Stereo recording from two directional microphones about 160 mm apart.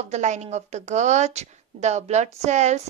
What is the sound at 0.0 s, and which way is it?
A woman's voice, 45° right (ahead or behind).